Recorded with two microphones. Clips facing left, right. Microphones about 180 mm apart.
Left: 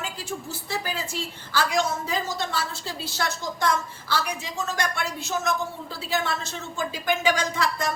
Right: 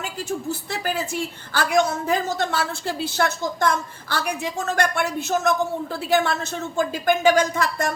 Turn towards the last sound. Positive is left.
turn(degrees=-55)  # may be behind; listen again after turning